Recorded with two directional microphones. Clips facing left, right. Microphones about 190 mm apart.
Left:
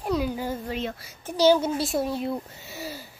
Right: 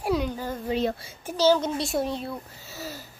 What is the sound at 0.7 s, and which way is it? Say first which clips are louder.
Speech: right 5 dB; 30° right (ahead or behind).